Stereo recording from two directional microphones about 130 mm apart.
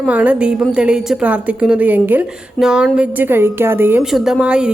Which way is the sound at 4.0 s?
5° right (ahead or behind).